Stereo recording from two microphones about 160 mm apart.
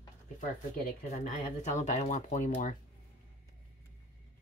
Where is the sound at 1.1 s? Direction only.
45° left (ahead or behind).